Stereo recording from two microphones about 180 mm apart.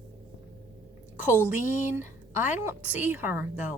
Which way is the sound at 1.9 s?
10° right (ahead or behind).